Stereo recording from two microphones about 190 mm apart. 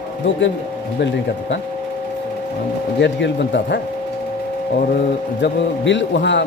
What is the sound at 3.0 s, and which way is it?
Speech, 65° left (ahead or behind).